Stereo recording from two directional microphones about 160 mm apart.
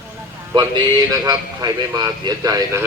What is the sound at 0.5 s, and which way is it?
A man's voice, 25° right (ahead or behind).